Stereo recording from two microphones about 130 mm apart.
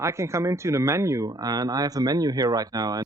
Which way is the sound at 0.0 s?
20° right (ahead or behind).